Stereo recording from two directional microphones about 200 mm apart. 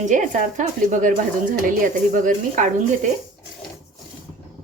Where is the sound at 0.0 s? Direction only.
40° right (ahead or behind).